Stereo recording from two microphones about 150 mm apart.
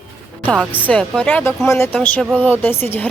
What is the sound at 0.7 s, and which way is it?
Speech, 10° left (ahead or behind).